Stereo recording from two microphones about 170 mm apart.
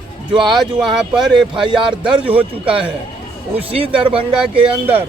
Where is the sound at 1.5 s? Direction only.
30° right (ahead or behind).